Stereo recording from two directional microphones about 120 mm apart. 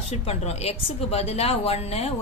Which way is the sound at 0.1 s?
60° left (ahead or behind).